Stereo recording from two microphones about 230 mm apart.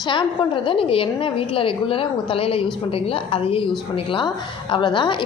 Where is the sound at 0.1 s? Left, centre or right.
Left.